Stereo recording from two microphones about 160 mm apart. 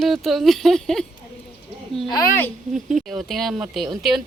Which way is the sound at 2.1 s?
20° left (ahead or behind).